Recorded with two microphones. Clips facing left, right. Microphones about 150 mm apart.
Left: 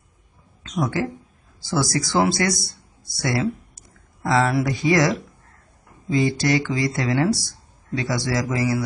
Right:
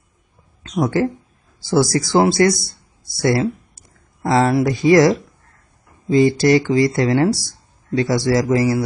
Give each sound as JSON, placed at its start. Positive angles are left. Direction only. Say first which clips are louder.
{"t": 0.7, "sound": "speech", "louder": "right 6 dB", "side_deg": -35}